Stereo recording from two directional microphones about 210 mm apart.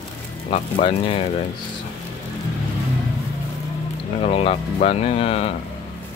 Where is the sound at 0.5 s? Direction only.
25° left (ahead or behind).